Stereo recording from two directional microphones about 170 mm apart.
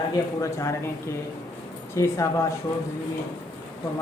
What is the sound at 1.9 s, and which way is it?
Speech, 15° left (ahead or behind).